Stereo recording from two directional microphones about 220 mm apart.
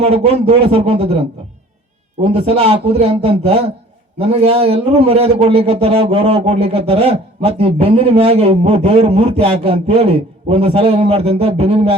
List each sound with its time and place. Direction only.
0.0 s a man's voice: 25° right (ahead or behind)
2.2 s a man's voice: 25° right (ahead or behind)